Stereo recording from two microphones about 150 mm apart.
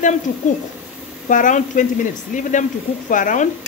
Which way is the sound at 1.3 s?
60° left (ahead or behind).